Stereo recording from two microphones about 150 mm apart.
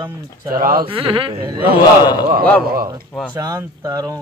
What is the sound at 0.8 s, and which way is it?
Speech, 35° right (ahead or behind).